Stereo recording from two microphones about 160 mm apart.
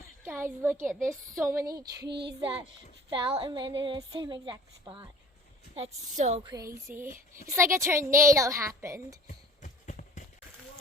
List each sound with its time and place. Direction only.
0.3 s a woman's voice: 15° right (ahead or behind)
2.0 s child singing: 90° right
3.1 s a woman's voice: 35° right (ahead or behind)
5.7 s a woman's voice: 40° right (ahead or behind)
6.4 s a woman's voice: 20° right (ahead or behind)
9.2 s a sound: 50° left (ahead or behind)